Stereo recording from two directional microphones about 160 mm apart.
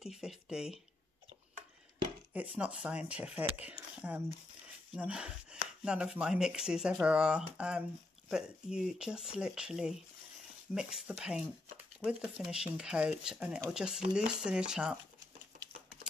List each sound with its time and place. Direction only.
0.0 s chopping: 5° right (ahead or behind)
2.3 s speech: 10° right (ahead or behind)
4.9 s chopping: 5° right (ahead or behind)